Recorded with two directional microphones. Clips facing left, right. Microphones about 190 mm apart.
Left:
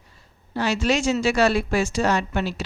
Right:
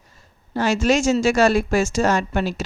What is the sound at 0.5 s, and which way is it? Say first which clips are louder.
A woman's voice: right 4 dB; 45° right (ahead or behind).